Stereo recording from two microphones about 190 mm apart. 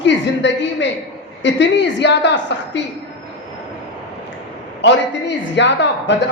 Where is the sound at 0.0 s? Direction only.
70° left (ahead or behind).